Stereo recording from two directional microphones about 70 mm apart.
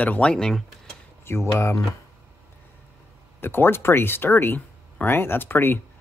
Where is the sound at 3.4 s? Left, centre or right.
Left.